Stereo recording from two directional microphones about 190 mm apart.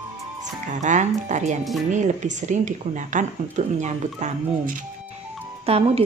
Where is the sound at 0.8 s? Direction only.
40° right (ahead or behind).